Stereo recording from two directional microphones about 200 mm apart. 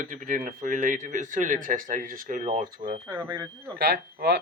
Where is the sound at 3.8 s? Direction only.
55° right (ahead or behind).